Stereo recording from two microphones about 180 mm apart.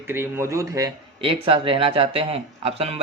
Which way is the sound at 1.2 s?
30° right (ahead or behind).